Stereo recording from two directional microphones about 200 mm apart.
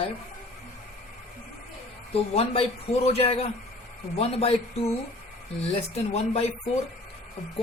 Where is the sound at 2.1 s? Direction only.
30° left (ahead or behind).